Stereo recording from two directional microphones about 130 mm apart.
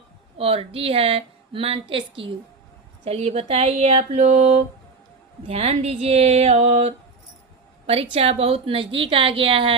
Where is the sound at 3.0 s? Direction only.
55° right (ahead or behind).